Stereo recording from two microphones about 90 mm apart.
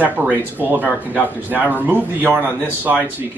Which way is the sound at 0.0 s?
20° right (ahead or behind).